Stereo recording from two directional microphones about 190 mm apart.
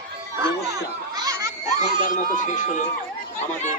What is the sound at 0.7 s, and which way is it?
Children playing, 20° right (ahead or behind).